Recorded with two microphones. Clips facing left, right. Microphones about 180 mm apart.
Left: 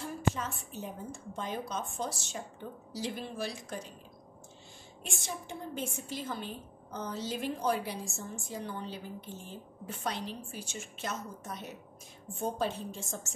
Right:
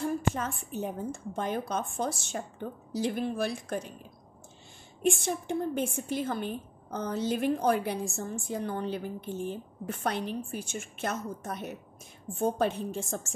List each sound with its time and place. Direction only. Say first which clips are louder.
0.0 s a woman's voice: right 4 dB; 50° right (ahead or behind)
5.0 s a woman's voice: right 13 dB; 55° right (ahead or behind)